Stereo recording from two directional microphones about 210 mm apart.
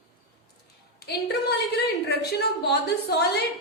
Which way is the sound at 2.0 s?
50° left (ahead or behind).